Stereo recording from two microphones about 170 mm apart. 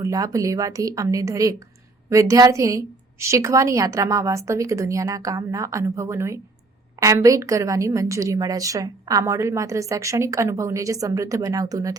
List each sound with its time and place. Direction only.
0.0 s a woman's voice: 20° right (ahead or behind)